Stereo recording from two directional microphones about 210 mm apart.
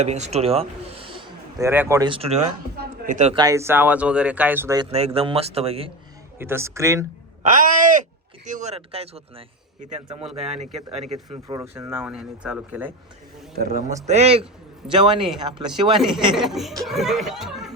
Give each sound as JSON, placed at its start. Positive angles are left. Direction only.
{"t": 0.0, "sound": "a man's voice", "side_deg": -35}
{"t": 2.7, "sound": "a sound", "side_deg": -50}
{"t": 3.2, "sound": "speech", "side_deg": -30}
{"t": 3.4, "sound": "speech", "side_deg": -15}
{"t": 4.9, "sound": "speech", "side_deg": -30}
{"t": 6.4, "sound": "speech", "side_deg": -10}
{"t": 7.4, "sound": "speech", "side_deg": -40}
{"t": 11.4, "sound": "speech", "side_deg": -15}
{"t": 13.6, "sound": "speech", "side_deg": -40}
{"t": 16.0, "sound": "speech", "side_deg": 0}